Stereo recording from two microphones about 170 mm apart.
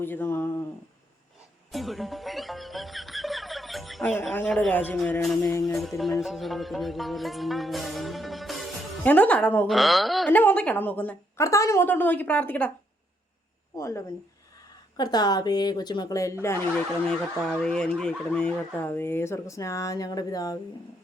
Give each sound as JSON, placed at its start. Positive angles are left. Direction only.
{"t": 0.0, "sound": "speech", "side_deg": 10}
{"t": 1.7, "sound": "music", "side_deg": 0}
{"t": 9.0, "sound": "speech", "side_deg": 10}
{"t": 13.7, "sound": "a woman's voice", "side_deg": 15}
{"t": 17.1, "sound": "speech", "side_deg": 5}